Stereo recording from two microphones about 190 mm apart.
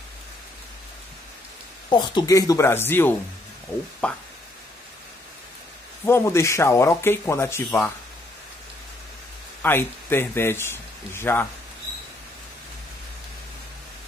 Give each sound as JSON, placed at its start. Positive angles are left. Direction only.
{"t": 1.9, "sound": "speech", "side_deg": 25}
{"t": 6.0, "sound": "speech", "side_deg": 15}
{"t": 9.6, "sound": "speech", "side_deg": 10}